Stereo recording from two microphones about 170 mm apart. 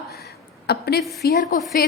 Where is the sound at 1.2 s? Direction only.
65° left (ahead or behind).